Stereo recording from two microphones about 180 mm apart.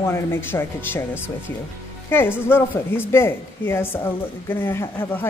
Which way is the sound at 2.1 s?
10° left (ahead or behind).